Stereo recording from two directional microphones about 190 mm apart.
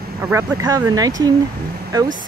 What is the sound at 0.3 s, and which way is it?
Speech, 15° right (ahead or behind).